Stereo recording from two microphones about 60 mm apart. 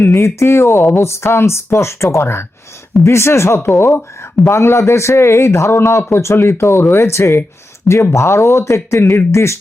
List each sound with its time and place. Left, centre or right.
0.1 s a man's voice: left